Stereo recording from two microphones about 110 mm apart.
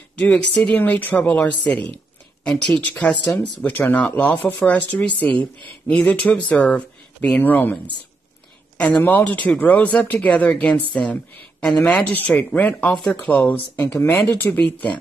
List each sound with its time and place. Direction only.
0.2 s a woman's voice: 5° left (ahead or behind)
0.7 s speech: 15° left (ahead or behind)
8.7 s speech: 10° left (ahead or behind)